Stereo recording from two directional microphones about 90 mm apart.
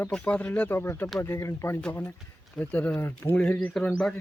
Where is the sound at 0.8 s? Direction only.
25° left (ahead or behind).